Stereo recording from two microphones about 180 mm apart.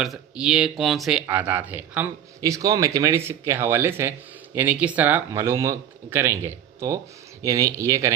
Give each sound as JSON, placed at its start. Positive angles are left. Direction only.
{"t": 0.0, "sound": "speech", "side_deg": -5}